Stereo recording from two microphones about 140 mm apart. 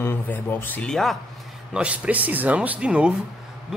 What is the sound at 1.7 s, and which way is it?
Speech, 10° right (ahead or behind).